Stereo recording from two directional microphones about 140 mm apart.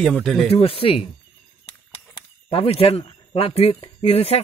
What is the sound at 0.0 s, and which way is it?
Speech, centre (ahead or behind).